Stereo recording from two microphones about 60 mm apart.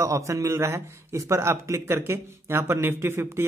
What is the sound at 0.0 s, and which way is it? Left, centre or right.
A man's voice, right.